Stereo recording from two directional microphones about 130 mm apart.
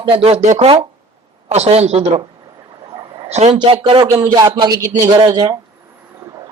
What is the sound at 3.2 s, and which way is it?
Speech, 55° right (ahead or behind).